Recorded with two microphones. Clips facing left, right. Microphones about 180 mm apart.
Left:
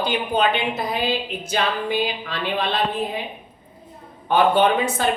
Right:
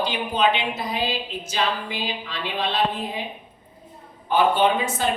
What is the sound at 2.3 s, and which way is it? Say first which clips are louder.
Speech: left 3 dB; 60° left (ahead or behind).